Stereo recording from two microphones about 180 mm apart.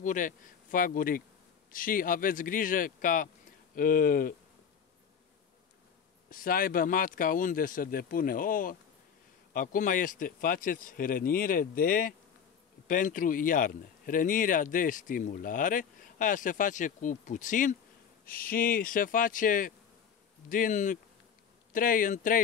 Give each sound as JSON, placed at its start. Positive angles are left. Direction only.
{"t": 0.0, "sound": "speech", "side_deg": 45}
{"t": 6.3, "sound": "speech", "side_deg": 55}